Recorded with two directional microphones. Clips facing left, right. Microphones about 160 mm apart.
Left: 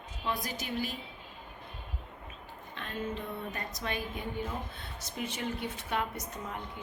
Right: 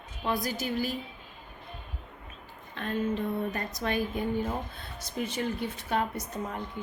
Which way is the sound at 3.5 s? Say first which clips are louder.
Right 6 dB; 45° right (ahead or behind).